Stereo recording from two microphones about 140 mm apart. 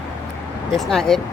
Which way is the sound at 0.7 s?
Centre (ahead or behind).